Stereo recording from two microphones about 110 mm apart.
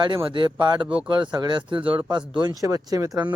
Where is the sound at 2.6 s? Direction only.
30° right (ahead or behind).